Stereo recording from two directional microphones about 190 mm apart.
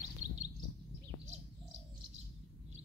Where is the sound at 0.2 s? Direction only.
35° right (ahead or behind).